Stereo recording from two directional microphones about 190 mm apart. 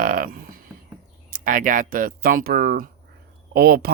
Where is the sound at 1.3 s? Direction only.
45° right (ahead or behind).